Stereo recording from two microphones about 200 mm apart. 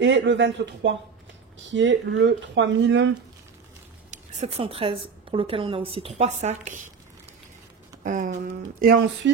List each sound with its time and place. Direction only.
0.0 s speech: 65° right (ahead or behind)
4.1 s a woman's voice: 35° right (ahead or behind)
8.0 s a sound: 40° right (ahead or behind)
8.8 s speech: 55° right (ahead or behind)